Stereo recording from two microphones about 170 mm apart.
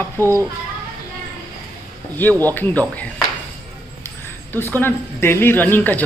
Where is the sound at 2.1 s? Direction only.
10° left (ahead or behind).